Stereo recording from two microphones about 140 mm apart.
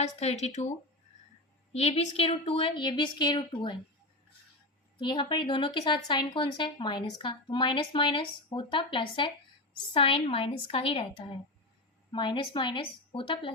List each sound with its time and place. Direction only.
0.2 s speech: 50° left (ahead or behind)
1.7 s speech: 45° left (ahead or behind)
4.9 s speech: 35° left (ahead or behind)